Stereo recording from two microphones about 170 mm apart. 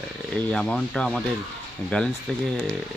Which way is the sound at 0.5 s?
5° left (ahead or behind).